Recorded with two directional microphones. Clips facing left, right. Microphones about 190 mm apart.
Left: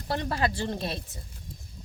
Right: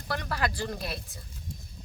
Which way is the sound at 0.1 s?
25° left (ahead or behind).